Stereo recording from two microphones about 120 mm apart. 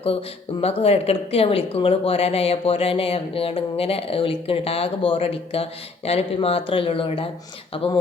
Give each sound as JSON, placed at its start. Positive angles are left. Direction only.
{"t": 0.6, "sound": "speech", "side_deg": 55}